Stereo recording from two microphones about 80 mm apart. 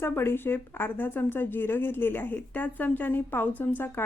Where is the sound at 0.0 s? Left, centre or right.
Left.